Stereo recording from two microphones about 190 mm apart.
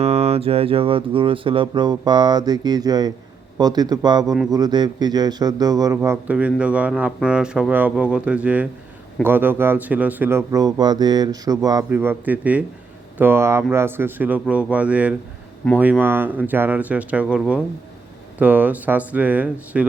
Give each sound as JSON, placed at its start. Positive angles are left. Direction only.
{"t": 0.0, "sound": "speech", "side_deg": -35}